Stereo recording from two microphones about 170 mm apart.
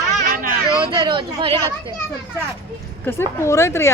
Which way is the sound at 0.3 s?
55° right (ahead or behind).